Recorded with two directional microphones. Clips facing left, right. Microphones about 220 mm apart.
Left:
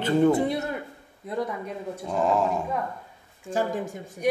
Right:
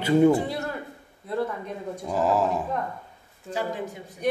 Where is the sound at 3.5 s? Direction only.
50° left (ahead or behind).